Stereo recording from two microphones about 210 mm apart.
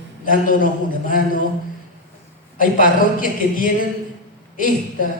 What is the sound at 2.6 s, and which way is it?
Speech, 40° left (ahead or behind).